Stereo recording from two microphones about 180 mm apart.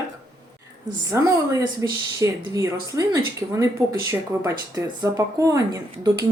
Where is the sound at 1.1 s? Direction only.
15° right (ahead or behind).